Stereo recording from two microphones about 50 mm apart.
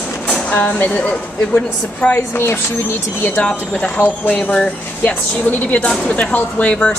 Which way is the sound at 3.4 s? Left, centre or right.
Left.